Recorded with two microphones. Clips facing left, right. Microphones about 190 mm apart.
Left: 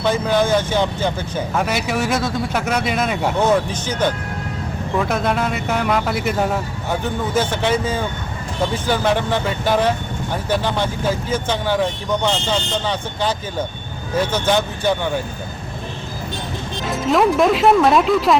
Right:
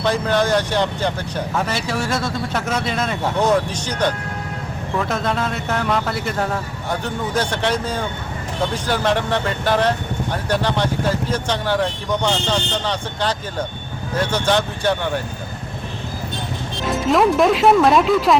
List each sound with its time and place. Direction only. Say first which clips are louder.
0.0 s speech: left 1 dB; 5° left (ahead or behind)
1.6 s speech: left 2 dB; 15° left (ahead or behind)
2.6 s speech: left 2 dB; centre (ahead or behind)
2.8 s speech: left 2 dB; 15° left (ahead or behind)
16.9 s speech: even; centre (ahead or behind)